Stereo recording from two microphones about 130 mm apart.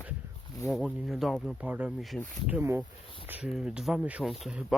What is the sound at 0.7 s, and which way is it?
Speech, centre (ahead or behind).